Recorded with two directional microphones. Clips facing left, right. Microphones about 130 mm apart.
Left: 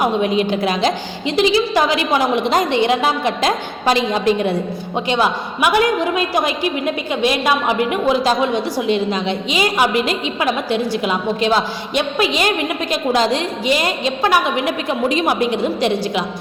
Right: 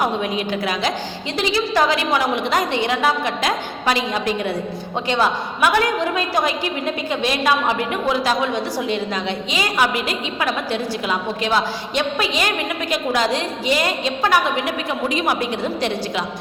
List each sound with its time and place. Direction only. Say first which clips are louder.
0.0 s a woman's voice: left 5 dB; 25° left (ahead or behind)